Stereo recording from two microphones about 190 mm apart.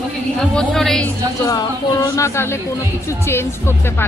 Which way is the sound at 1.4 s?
15° left (ahead or behind).